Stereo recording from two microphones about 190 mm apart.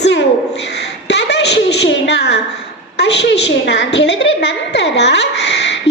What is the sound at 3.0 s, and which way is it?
A woman's voice, 65° left (ahead or behind).